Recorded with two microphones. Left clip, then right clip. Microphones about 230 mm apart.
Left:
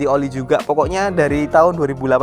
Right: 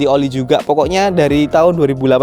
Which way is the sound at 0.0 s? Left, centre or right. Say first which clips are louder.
Right 4 dB; right.